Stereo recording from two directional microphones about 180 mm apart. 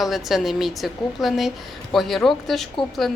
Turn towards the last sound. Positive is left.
turn(degrees=0)  # may be behind; listen again after turning